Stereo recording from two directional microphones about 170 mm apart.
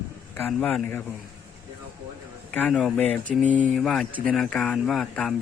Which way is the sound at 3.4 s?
45° right (ahead or behind).